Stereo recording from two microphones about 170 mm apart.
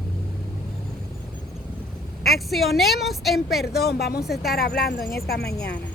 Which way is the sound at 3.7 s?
70° left (ahead or behind).